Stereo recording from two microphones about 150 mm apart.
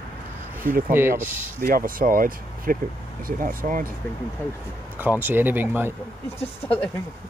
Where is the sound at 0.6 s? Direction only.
70° right (ahead or behind).